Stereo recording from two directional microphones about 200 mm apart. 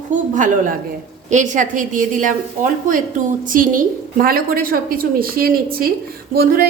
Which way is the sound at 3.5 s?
40° right (ahead or behind).